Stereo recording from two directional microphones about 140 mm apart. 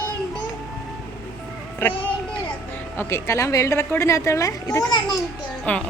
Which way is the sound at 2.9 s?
20° left (ahead or behind).